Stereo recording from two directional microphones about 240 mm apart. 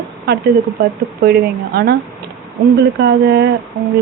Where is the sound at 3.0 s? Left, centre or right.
Right.